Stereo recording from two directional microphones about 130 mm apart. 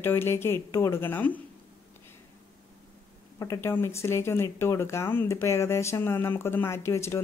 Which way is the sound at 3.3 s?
25° left (ahead or behind).